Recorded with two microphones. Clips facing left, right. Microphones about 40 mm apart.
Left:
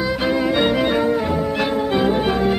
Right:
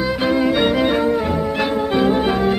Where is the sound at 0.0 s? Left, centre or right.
Centre.